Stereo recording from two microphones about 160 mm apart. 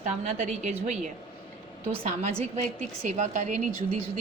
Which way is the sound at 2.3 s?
40° right (ahead or behind).